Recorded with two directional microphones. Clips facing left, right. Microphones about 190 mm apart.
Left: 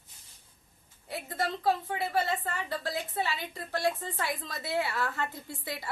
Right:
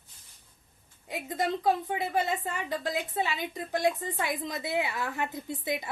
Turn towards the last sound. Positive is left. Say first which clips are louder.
# right 7 dB
turn(degrees=-20)  # may be behind; listen again after turning